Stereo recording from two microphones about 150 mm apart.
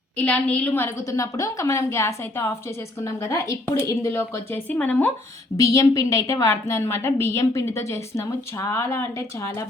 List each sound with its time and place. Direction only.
0.2 s a woman's voice: 10° left (ahead or behind)
5.5 s a woman's voice: 20° left (ahead or behind)